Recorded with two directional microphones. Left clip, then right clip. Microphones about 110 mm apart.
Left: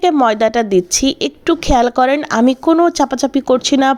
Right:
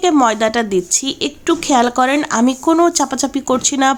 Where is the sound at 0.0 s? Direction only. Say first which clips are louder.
Left 1 dB; 40° left (ahead or behind).